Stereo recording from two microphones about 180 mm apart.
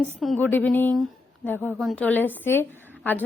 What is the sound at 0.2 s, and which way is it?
A woman's voice, 5° left (ahead or behind).